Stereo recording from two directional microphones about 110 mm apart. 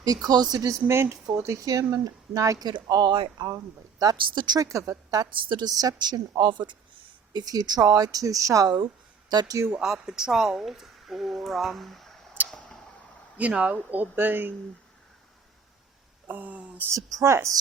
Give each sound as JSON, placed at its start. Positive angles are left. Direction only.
{"t": 0.0, "sound": "speech", "side_deg": -35}
{"t": 3.4, "sound": "speech", "side_deg": -35}
{"t": 5.3, "sound": "speech", "side_deg": -45}
{"t": 9.7, "sound": "speech", "side_deg": -5}
{"t": 12.5, "sound": "tick-tock", "side_deg": 5}
{"t": 13.3, "sound": "speech", "side_deg": -10}
{"t": 16.2, "sound": "speech", "side_deg": -15}
{"t": 16.9, "sound": "speech", "side_deg": -30}